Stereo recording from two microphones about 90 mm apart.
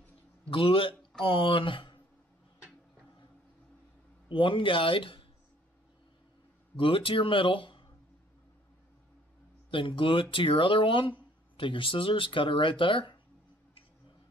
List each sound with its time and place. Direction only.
0.5 s a man's voice: 85° left
1.2 s speech: 75° left (ahead or behind)
4.3 s speech: 75° left (ahead or behind)
6.8 s speech: 80° left
9.7 s speech: 70° left (ahead or behind)